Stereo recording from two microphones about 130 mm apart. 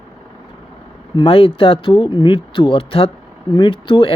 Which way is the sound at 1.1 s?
45° left (ahead or behind).